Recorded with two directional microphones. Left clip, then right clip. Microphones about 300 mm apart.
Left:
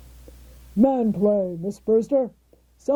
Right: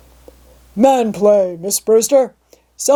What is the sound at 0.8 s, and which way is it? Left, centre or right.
Speech, centre.